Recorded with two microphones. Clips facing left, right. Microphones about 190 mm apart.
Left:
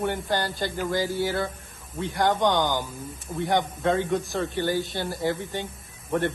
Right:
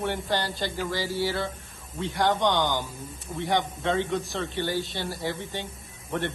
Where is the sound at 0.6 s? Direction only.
50° left (ahead or behind).